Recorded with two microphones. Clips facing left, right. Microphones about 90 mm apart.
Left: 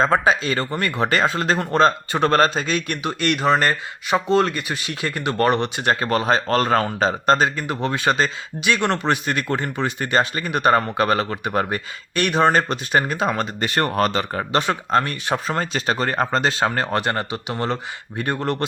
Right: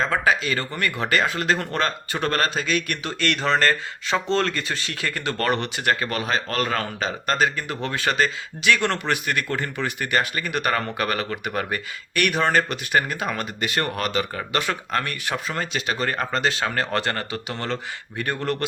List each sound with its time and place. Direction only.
0.0 s speech: 30° left (ahead or behind)
15.4 s speech: 40° left (ahead or behind)